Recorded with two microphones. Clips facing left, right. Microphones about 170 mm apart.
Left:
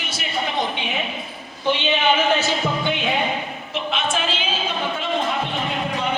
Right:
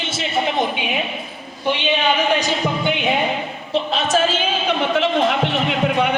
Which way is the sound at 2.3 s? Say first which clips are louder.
Right 2 dB; 15° right (ahead or behind).